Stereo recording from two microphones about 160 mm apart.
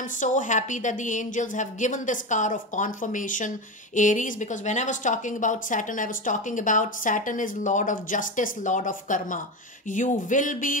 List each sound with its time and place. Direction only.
0.2 s a woman's voice: 55° left (ahead or behind)